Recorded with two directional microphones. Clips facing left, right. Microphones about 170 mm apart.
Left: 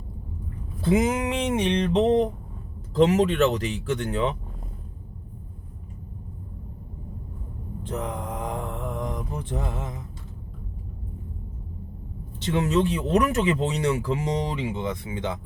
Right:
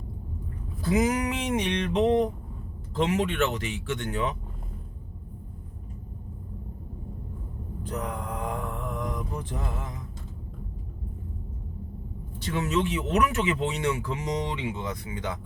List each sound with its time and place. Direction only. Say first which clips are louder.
0.8 s a sound: left 2 dB; 25° left (ahead or behind)
2.9 s speech: left 6 dB; 35° left (ahead or behind)
7.9 s mantra: left 2 dB; 25° left (ahead or behind)
12.4 s speech: left 4 dB; 25° left (ahead or behind)